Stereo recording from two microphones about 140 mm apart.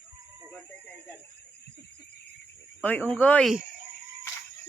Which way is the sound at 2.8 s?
10° left (ahead or behind).